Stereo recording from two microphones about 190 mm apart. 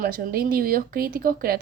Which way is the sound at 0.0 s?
50° right (ahead or behind).